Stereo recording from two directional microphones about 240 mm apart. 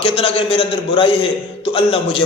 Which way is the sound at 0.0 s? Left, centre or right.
Left.